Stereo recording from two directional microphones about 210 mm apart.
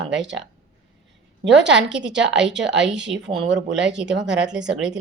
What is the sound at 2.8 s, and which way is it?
Speech, 5° right (ahead or behind).